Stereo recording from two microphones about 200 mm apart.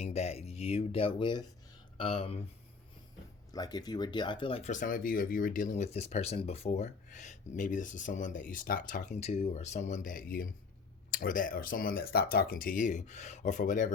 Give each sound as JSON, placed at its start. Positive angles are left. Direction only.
{"t": 0.0, "sound": "speech", "side_deg": 30}
{"t": 3.5, "sound": "speech", "side_deg": 20}